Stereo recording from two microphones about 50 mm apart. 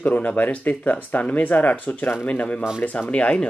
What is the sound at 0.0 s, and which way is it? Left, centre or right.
Speech, left.